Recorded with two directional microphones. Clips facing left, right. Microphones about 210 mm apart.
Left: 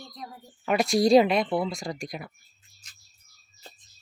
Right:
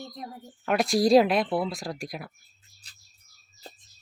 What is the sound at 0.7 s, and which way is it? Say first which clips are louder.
Speech: left 1 dB; centre (ahead or behind).